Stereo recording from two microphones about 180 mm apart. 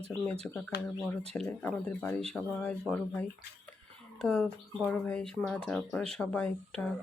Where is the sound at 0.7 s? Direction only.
65° left (ahead or behind).